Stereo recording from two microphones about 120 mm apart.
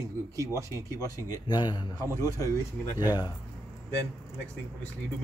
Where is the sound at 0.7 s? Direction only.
30° left (ahead or behind).